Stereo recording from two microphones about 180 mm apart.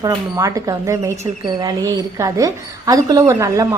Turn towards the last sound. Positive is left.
turn(degrees=-15)  # may be behind; listen again after turning